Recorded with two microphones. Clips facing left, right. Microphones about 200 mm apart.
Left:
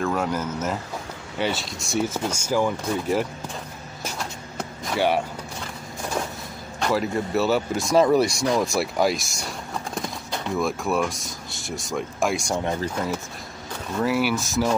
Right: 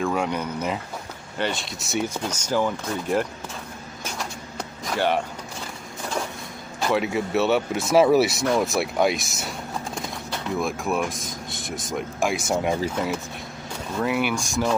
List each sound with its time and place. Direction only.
0.0 s speech: centre (ahead or behind)
4.9 s speech: 10° left (ahead or behind)
6.9 s speech: 5° right (ahead or behind)